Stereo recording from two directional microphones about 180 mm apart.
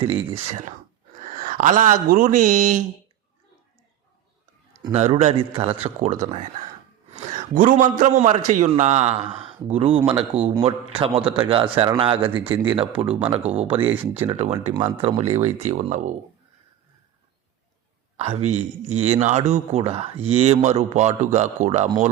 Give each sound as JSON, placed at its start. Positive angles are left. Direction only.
{"t": 0.0, "sound": "a man's voice", "side_deg": -30}
{"t": 4.9, "sound": "a man's voice", "side_deg": -40}
{"t": 13.1, "sound": "speech", "side_deg": -10}
{"t": 13.4, "sound": "a man's voice", "side_deg": -35}
{"t": 13.7, "sound": "speech", "side_deg": -10}
{"t": 14.1, "sound": "a man's voice", "side_deg": -35}
{"t": 14.7, "sound": "a man's voice", "side_deg": -25}
{"t": 18.2, "sound": "a man's voice", "side_deg": -35}